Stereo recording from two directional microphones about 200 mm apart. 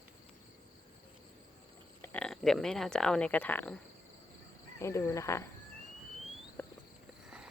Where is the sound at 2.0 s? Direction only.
5° left (ahead or behind).